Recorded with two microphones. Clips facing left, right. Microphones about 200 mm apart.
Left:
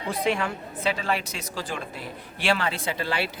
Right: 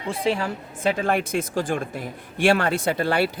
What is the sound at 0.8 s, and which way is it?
A man's voice, 50° right (ahead or behind).